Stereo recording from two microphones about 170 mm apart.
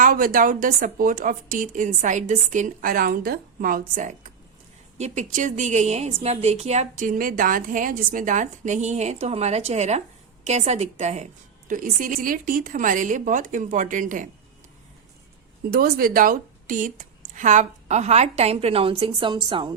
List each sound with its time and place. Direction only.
0.0 s a woman's voice: 55° right (ahead or behind)
15.7 s a woman's voice: 60° right (ahead or behind); by 19.7 s 30° right (ahead or behind)